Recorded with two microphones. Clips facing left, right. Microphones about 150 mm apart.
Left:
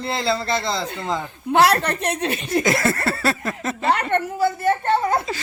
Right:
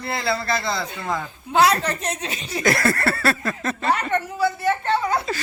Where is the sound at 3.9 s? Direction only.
60° left (ahead or behind).